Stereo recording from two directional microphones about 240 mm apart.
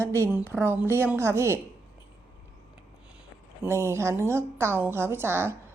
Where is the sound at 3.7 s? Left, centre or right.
Centre.